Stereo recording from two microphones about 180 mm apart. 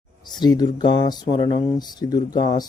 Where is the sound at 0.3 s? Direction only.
25° left (ahead or behind).